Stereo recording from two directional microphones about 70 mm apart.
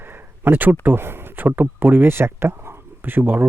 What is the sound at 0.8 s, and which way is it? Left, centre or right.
Speech, right.